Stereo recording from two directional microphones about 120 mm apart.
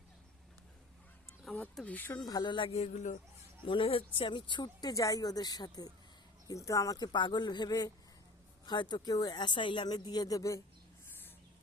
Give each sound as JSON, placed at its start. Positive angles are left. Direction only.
{"t": 1.7, "sound": "speech", "side_deg": 10}
{"t": 2.2, "sound": "speech", "side_deg": 35}
{"t": 2.7, "sound": "speech", "side_deg": 70}
{"t": 3.7, "sound": "speech", "side_deg": 50}